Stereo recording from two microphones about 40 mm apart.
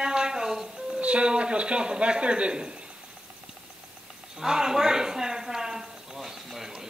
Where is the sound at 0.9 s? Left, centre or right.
Right.